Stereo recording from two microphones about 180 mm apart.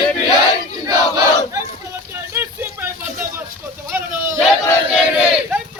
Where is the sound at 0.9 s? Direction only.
20° right (ahead or behind).